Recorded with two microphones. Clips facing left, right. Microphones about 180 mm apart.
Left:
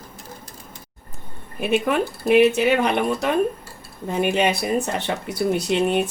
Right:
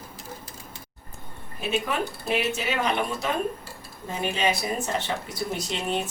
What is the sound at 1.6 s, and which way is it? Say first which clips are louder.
Speech: left 7 dB; 60° left (ahead or behind).